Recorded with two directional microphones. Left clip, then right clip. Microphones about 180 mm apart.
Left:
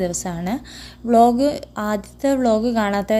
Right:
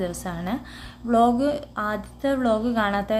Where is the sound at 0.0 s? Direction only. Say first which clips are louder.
Left 5 dB; 40° left (ahead or behind).